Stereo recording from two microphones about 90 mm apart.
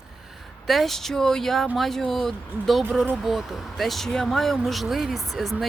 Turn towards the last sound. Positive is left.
turn(degrees=0)  # may be behind; listen again after turning